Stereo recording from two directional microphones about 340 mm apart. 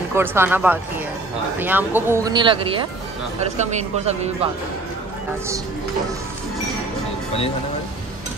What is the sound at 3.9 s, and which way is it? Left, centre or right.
Speech, centre.